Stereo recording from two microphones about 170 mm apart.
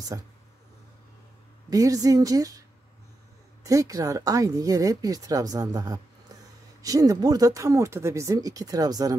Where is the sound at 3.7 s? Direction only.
20° right (ahead or behind).